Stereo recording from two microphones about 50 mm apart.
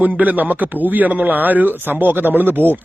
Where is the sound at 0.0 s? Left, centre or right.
Right.